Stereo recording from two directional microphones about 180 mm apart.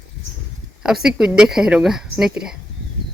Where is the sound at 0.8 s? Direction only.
5° right (ahead or behind).